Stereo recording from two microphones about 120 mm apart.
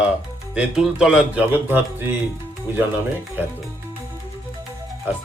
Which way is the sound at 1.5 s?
15° right (ahead or behind).